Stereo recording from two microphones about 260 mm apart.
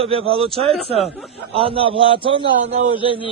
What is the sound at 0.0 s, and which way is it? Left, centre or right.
A man's voice, right.